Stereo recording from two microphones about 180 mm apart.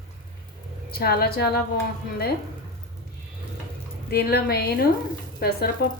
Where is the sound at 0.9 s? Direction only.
60° left (ahead or behind).